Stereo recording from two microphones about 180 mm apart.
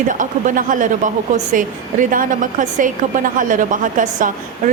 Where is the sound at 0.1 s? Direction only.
45° right (ahead or behind).